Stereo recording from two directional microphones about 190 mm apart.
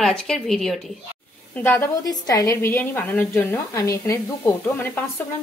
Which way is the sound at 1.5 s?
10° left (ahead or behind).